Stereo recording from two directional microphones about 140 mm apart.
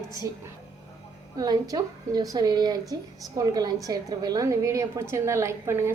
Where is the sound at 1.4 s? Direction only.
30° right (ahead or behind).